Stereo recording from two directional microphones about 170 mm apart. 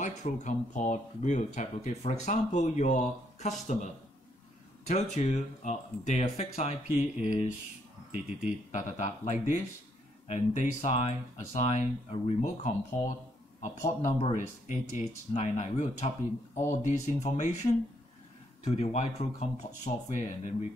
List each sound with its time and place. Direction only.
0.0 s speech: 45° left (ahead or behind)
5.1 s speech: 45° left (ahead or behind)
8.1 s speech: 10° right (ahead or behind)
8.7 s speech: 45° left (ahead or behind)